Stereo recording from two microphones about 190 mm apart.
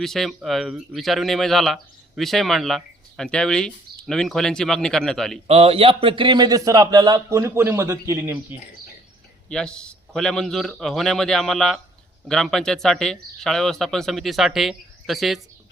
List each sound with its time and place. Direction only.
0.0 s speech: centre (ahead or behind)
5.5 s a man's voice: 30° right (ahead or behind); by 8.5 s 10° right (ahead or behind)
9.5 s speech: 5° left (ahead or behind)